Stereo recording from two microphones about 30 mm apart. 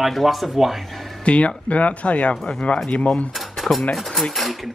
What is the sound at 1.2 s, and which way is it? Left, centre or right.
Speech, left.